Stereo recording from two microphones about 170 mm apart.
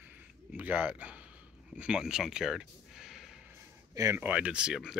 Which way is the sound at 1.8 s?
5° right (ahead or behind).